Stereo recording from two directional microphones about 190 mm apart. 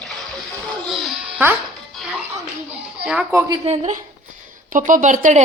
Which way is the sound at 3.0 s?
5° right (ahead or behind).